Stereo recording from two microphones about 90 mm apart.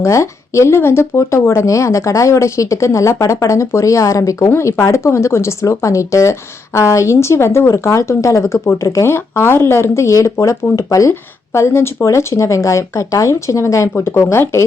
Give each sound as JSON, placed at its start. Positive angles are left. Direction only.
{"t": 0.0, "sound": "speech", "side_deg": 35}